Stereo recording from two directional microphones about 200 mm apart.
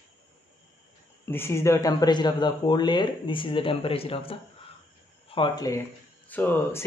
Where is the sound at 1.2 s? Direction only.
10° left (ahead or behind).